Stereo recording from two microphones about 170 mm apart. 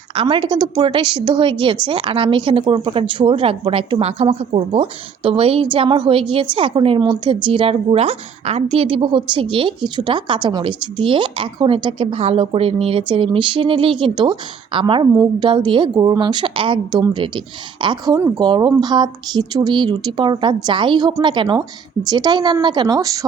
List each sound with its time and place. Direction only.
0.1 s a woman's voice: 30° right (ahead or behind)